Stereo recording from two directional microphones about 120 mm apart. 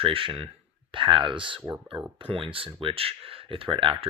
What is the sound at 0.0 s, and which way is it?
Speech, 50° right (ahead or behind).